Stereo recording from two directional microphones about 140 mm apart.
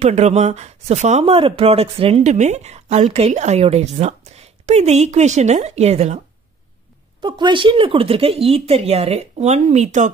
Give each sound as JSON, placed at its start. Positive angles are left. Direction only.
{"t": 0.0, "sound": "speech", "side_deg": -50}
{"t": 7.2, "sound": "speech", "side_deg": -30}